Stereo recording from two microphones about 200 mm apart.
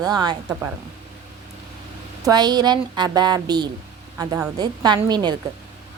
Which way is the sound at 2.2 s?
20° right (ahead or behind).